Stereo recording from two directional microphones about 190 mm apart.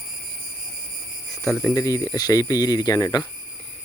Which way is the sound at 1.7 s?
15° left (ahead or behind).